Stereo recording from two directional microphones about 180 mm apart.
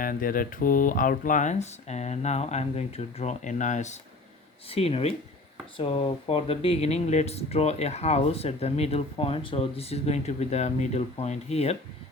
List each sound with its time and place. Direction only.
0.0 s speech: 50° left (ahead or behind); by 11.8 s 35° left (ahead or behind)